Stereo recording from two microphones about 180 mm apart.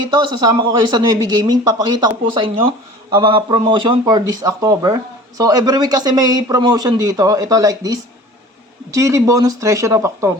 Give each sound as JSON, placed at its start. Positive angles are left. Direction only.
{"t": 0.0, "sound": "speech", "side_deg": -25}